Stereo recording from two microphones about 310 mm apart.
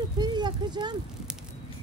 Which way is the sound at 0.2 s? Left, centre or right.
Centre.